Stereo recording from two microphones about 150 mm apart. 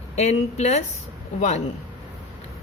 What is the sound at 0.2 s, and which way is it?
A woman's voice, 50° left (ahead or behind).